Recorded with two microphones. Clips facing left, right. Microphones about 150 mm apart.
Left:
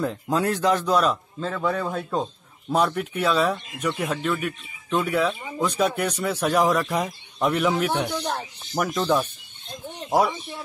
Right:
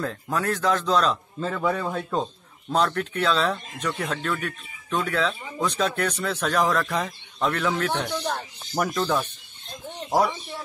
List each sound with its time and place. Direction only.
0.0 s speech: 20° left (ahead or behind)
1.4 s a man's voice: centre (ahead or behind)